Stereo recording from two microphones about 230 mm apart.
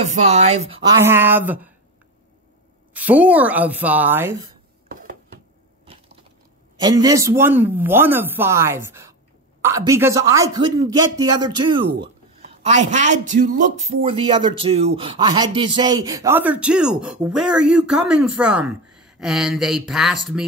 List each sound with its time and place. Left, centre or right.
0.1 s speech: right
1.0 s speech: centre
2.9 s speech: centre
6.8 s speech: centre